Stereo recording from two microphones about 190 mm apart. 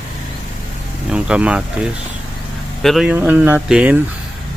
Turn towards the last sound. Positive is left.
turn(degrees=-10)  # may be behind; listen again after turning